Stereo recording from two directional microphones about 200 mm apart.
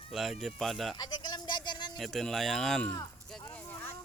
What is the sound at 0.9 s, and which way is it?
Speech, 20° left (ahead or behind).